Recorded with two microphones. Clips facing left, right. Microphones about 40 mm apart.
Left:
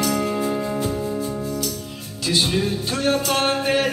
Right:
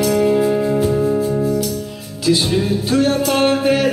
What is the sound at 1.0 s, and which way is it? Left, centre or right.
Music, right.